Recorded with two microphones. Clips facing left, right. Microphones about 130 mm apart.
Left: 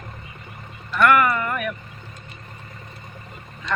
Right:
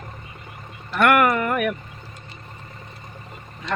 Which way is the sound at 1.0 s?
65° right (ahead or behind).